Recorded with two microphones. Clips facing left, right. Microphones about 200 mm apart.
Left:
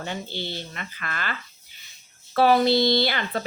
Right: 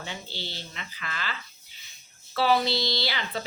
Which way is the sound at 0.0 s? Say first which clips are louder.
Left 6 dB; 55° left (ahead or behind).